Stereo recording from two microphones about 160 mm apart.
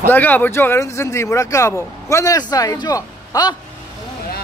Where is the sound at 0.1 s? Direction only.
10° left (ahead or behind).